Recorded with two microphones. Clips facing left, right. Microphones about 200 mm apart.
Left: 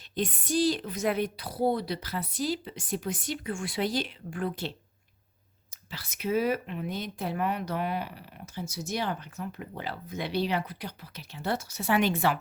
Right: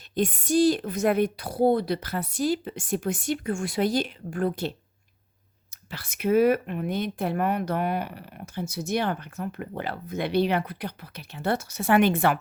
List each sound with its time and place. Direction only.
0.1 s speech: 45° right (ahead or behind)
5.9 s speech: 55° right (ahead or behind)